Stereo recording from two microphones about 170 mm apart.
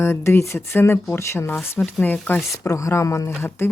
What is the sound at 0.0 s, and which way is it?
Speech, 15° left (ahead or behind).